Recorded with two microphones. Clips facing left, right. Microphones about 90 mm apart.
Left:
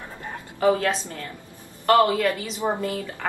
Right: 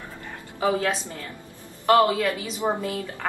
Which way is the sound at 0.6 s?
5° right (ahead or behind).